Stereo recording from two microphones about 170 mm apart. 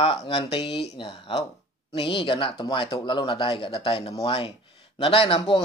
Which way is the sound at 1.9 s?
30° left (ahead or behind).